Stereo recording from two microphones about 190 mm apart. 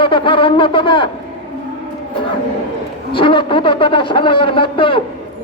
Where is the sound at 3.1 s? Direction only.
25° left (ahead or behind).